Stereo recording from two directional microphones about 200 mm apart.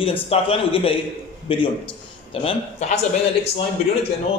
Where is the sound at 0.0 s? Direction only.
30° left (ahead or behind).